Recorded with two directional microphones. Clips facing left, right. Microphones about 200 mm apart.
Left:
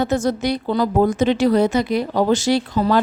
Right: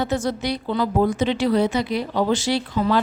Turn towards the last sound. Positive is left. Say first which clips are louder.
# left 3 dB
turn(degrees=40)  # may be behind; listen again after turning